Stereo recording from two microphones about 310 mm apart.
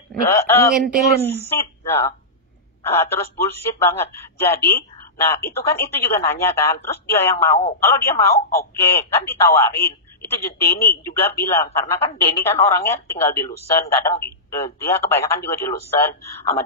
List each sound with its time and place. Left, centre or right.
0.1 s a man's voice: centre
8.2 s a woman's voice: centre
8.7 s speech: centre
12.1 s a woman's voice: centre
12.7 s speech: centre